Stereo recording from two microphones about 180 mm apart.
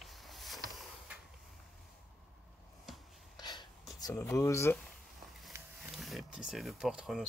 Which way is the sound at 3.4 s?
25° left (ahead or behind).